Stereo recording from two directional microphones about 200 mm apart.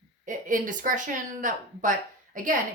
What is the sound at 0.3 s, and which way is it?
A woman's voice, 40° right (ahead or behind).